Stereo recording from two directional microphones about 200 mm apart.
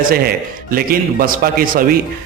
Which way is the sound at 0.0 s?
45° right (ahead or behind).